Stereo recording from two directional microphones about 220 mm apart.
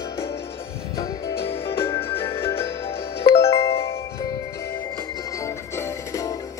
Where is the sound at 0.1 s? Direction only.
15° left (ahead or behind).